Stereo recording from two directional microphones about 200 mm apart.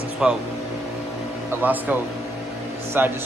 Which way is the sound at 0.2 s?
5° right (ahead or behind).